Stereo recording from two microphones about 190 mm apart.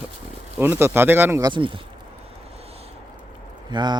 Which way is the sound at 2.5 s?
30° right (ahead or behind).